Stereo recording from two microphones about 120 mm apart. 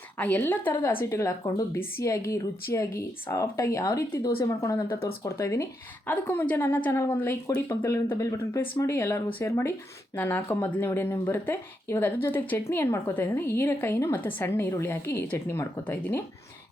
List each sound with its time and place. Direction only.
0.2 s a woman's voice: 15° left (ahead or behind)